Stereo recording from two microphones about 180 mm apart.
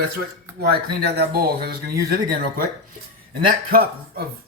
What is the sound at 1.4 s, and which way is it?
Speech, 60° right (ahead or behind).